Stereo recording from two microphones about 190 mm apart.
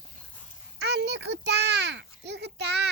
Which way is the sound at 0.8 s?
60° right (ahead or behind).